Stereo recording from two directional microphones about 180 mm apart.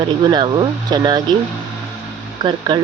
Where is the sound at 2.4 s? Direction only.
25° right (ahead or behind).